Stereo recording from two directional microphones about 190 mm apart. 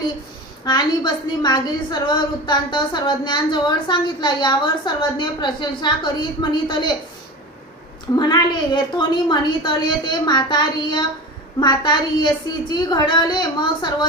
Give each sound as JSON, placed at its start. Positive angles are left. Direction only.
{"t": 0.6, "sound": "a woman's voice", "side_deg": 20}
{"t": 8.1, "sound": "a woman's voice", "side_deg": 20}